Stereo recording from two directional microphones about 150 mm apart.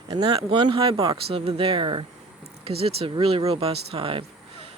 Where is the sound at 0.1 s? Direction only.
35° right (ahead or behind).